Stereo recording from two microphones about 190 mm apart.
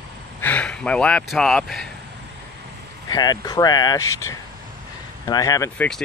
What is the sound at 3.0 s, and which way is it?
Speech, 20° left (ahead or behind).